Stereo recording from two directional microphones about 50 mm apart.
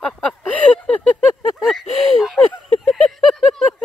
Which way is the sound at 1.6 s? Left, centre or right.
Centre.